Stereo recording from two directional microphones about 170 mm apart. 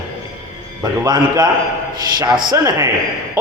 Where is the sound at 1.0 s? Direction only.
20° right (ahead or behind).